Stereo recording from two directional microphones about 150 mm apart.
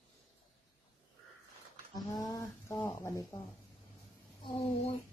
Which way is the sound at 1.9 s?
25° left (ahead or behind).